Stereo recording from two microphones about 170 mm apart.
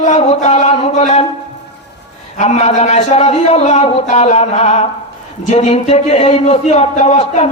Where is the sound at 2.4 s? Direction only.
40° left (ahead or behind).